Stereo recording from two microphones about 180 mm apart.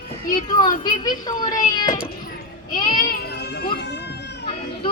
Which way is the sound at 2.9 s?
55° left (ahead or behind).